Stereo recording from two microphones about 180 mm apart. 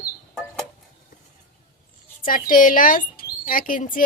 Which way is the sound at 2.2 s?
50° left (ahead or behind).